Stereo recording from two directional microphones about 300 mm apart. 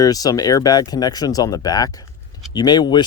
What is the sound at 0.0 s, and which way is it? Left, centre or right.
Speech, centre.